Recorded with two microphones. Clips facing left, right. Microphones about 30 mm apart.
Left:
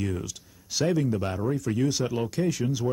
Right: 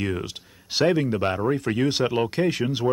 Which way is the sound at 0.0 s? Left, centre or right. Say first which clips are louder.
Right 4 dB; right.